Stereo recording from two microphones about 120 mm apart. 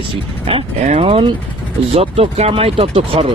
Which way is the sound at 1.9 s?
60° right (ahead or behind).